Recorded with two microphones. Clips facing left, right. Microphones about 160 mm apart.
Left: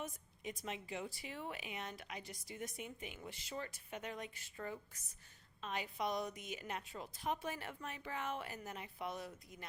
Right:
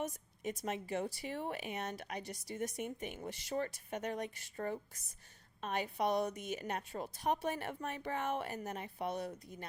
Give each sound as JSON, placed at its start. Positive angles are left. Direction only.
{"t": 0.1, "sound": "a woman's voice", "side_deg": -45}
{"t": 6.2, "sound": "speech", "side_deg": -40}
{"t": 7.2, "sound": "a woman's voice", "side_deg": -60}